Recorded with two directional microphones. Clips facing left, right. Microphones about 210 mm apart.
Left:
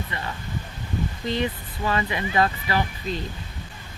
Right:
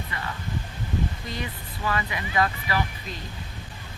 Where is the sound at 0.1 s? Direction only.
25° left (ahead or behind).